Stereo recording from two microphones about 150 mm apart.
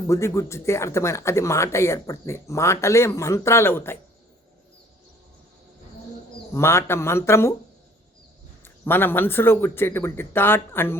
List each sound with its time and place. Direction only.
0.1 s speech: 20° left (ahead or behind)
6.5 s a man's voice: 15° left (ahead or behind)
8.6 s a man's voice: 15° left (ahead or behind)